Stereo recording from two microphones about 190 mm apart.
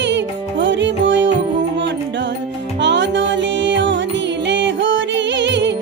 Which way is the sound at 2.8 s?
70° right (ahead or behind).